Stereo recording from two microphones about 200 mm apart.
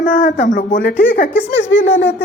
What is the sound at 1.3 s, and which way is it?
Speech, 65° left (ahead or behind).